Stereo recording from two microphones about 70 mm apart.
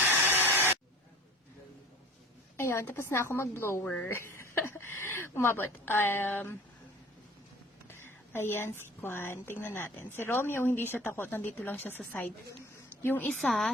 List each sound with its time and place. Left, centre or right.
0.3 s a sound: left
2.6 s a woman's voice: left
3.8 s a woman's voice: left
4.1 s a woman's voice: left
7.9 s a woman's voice: left
13.2 s a woman's voice: centre